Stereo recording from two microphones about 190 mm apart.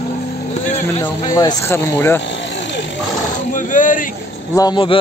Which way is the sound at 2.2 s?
70° left (ahead or behind).